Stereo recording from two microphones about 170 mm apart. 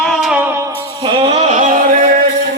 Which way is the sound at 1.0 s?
30° right (ahead or behind).